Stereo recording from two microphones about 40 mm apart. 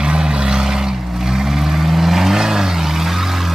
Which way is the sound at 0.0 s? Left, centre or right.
Right.